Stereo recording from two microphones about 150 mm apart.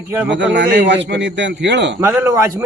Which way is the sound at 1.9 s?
15° right (ahead or behind).